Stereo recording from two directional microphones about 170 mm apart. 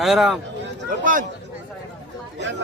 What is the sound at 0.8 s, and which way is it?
Speech, 55° right (ahead or behind).